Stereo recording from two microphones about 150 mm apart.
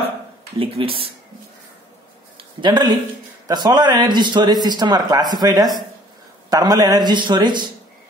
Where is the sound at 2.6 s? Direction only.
30° right (ahead or behind).